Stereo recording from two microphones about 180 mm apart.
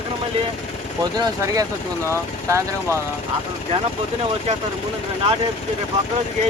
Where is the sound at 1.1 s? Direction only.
20° right (ahead or behind).